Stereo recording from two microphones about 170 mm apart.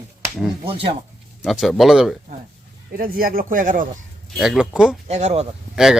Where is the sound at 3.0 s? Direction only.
60° right (ahead or behind).